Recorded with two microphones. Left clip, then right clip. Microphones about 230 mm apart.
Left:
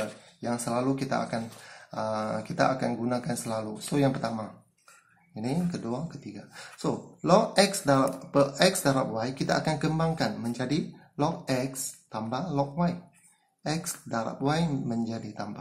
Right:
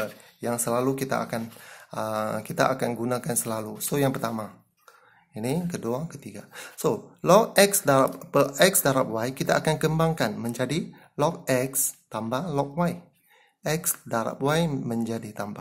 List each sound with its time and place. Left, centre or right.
0.4 s speech: right